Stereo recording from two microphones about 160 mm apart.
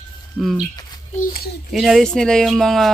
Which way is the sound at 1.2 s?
70° left (ahead or behind).